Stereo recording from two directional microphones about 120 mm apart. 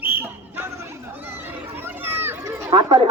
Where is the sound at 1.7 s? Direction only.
15° right (ahead or behind).